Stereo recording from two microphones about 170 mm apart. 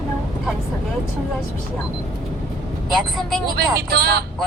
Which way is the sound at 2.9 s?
Centre (ahead or behind).